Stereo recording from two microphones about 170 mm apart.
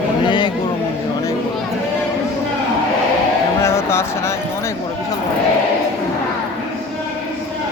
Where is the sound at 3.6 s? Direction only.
15° left (ahead or behind).